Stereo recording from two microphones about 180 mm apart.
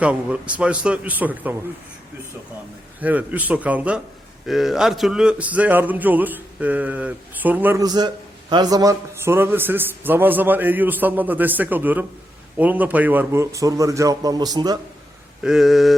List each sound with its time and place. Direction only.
0.0 s speech: 5° right (ahead or behind)
3.0 s speech: 10° right (ahead or behind)
15.4 s speech: centre (ahead or behind)